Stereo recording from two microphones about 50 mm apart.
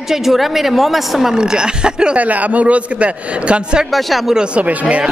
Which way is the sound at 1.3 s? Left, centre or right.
Centre.